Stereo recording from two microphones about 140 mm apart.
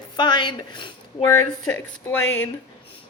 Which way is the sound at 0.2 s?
35° left (ahead or behind).